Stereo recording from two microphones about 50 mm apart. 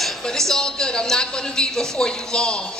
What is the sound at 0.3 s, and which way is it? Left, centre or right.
A woman's voice, centre.